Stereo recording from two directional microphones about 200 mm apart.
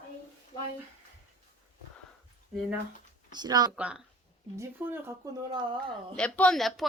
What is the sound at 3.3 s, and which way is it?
Speech, 20° right (ahead or behind).